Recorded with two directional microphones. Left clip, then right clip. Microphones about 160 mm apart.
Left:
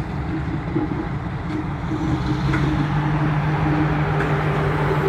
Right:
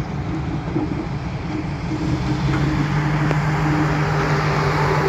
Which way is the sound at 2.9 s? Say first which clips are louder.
Right 1 dB; 40° left (ahead or behind).